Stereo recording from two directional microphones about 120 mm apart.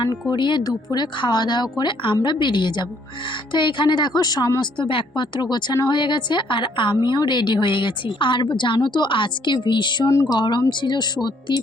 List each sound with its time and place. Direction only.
0.3 s a woman's voice: 40° left (ahead or behind)
10.1 s speech: 25° left (ahead or behind)
10.3 s a woman's voice: 40° left (ahead or behind)